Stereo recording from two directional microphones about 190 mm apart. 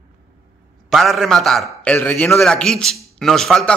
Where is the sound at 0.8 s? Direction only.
Centre (ahead or behind).